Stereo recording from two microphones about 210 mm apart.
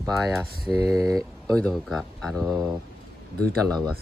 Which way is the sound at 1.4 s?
5° left (ahead or behind).